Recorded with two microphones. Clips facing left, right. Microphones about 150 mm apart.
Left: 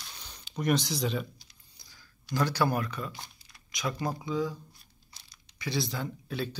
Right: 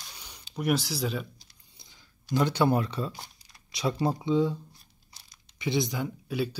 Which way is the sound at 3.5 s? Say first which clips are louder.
Right 5 dB; 30° right (ahead or behind).